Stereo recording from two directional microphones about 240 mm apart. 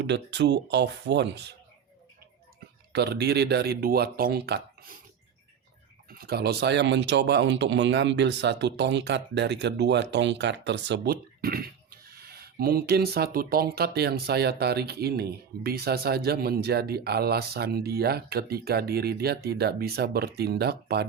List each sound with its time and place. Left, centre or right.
0.0 s speech: right
2.9 s speech: right
6.1 s speech: right